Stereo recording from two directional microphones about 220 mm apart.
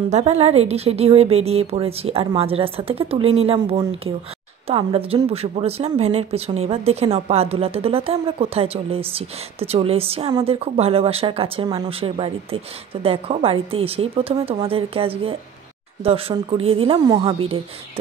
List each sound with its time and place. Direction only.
0.1 s speech: 30° right (ahead or behind)